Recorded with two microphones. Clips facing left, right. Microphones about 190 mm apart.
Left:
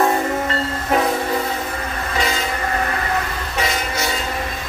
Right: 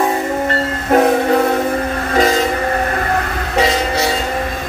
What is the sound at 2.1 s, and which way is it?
Train, 45° right (ahead or behind).